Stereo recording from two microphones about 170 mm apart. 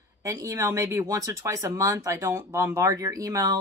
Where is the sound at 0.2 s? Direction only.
20° right (ahead or behind).